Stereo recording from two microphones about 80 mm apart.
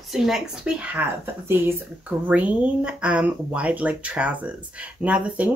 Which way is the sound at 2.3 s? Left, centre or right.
Centre.